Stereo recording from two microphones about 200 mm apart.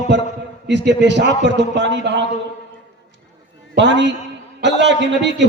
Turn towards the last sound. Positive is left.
turn(degrees=-60)  # may be behind; listen again after turning